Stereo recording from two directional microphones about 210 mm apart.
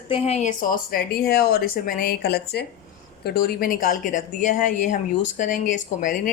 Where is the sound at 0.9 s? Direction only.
45° left (ahead or behind).